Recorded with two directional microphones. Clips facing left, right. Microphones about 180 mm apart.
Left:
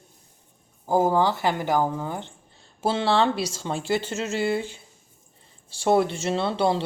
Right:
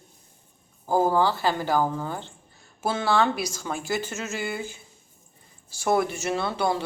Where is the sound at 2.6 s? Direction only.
30° left (ahead or behind).